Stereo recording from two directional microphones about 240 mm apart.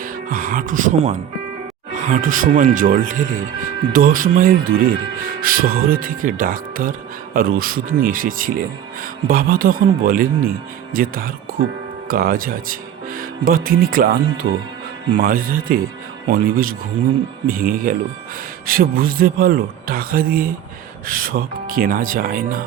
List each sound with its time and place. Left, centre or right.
0.0 s speech: right